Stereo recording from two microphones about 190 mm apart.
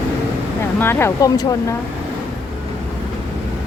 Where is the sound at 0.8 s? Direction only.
15° left (ahead or behind).